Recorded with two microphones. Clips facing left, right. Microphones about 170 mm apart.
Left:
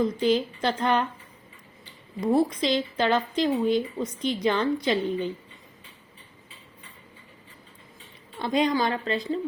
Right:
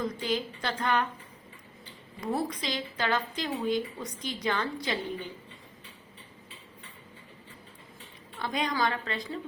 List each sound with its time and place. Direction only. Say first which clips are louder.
0.0 s a woman's voice: left 8 dB; 20° left (ahead or behind)
2.2 s a woman's voice: left 9 dB; 25° left (ahead or behind)
8.4 s a woman's voice: left 6 dB; 25° left (ahead or behind)